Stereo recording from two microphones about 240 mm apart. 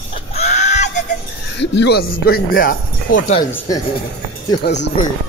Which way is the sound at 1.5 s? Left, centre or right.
Left.